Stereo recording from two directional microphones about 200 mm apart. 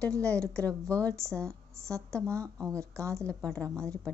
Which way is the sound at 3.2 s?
5° left (ahead or behind).